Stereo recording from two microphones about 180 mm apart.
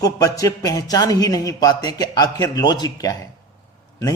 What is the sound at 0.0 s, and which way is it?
A man's voice, 20° left (ahead or behind).